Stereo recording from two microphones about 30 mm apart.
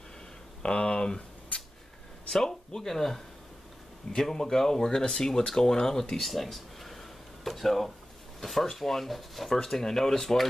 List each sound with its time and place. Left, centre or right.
0.6 s a sound: left
2.2 s speech: centre
4.2 s speech: centre
6.1 s speech: centre
9.6 s speech: centre